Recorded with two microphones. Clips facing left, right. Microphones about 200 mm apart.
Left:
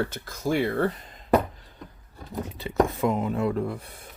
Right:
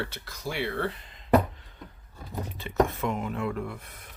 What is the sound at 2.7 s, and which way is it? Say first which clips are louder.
Speech: left 3 dB; 35° left (ahead or behind).